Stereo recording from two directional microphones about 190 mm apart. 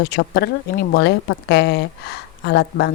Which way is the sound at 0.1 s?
60° left (ahead or behind).